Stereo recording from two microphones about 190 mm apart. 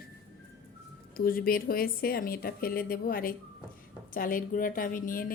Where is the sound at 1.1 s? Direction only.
50° left (ahead or behind).